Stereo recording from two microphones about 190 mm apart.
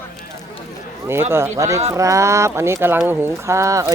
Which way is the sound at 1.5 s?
15° right (ahead or behind).